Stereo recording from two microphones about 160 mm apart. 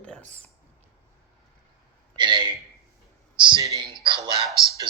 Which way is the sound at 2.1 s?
30° right (ahead or behind).